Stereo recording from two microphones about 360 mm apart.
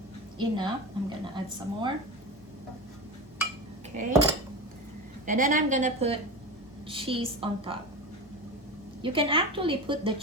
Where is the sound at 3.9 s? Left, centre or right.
Centre.